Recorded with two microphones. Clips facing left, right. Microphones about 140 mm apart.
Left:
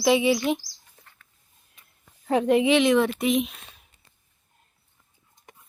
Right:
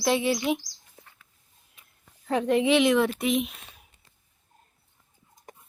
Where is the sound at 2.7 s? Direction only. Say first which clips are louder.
Left 1 dB; 5° right (ahead or behind).